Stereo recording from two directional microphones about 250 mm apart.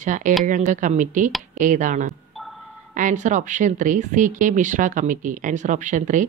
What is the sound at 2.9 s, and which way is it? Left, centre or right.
Speech, right.